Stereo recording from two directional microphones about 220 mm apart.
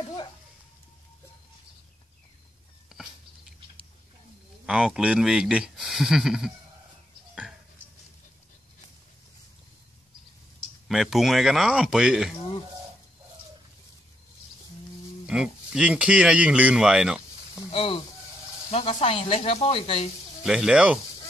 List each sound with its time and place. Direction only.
2.9 s a sound: centre (ahead or behind)
4.6 s speech: centre (ahead or behind)
10.9 s speech: centre (ahead or behind)
15.2 s speech: 5° right (ahead or behind)
17.6 s speech: 25° left (ahead or behind)
20.4 s speech: 5° right (ahead or behind)